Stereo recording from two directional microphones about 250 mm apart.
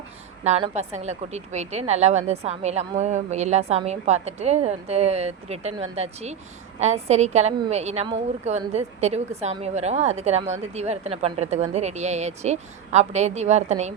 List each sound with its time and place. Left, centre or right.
0.4 s a woman's voice: right